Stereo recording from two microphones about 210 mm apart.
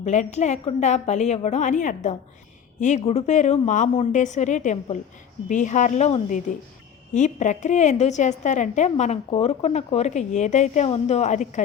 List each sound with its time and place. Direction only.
0.0 s a woman's voice: 35° left (ahead or behind)